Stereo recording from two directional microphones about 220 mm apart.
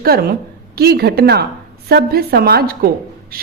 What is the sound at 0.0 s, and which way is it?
A woman's voice, 45° right (ahead or behind).